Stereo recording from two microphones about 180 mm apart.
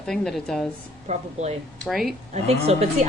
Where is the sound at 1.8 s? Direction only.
Centre (ahead or behind).